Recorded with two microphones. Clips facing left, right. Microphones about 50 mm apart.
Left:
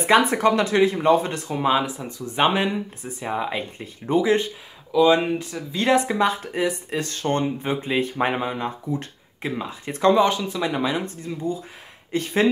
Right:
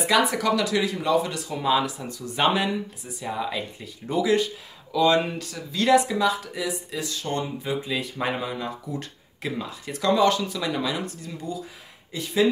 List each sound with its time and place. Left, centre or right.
0.0 s speech: left
4.9 s speech: centre
12.1 s speech: left